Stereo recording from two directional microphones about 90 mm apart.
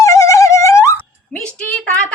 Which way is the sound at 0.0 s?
40° left (ahead or behind).